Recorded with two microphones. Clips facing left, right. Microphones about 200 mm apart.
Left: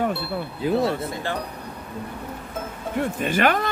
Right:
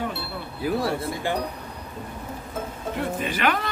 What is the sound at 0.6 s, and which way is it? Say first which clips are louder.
Speech: left 3 dB; 25° left (ahead or behind).